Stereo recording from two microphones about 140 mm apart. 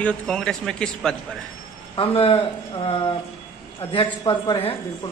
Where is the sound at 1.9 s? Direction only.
40° left (ahead or behind).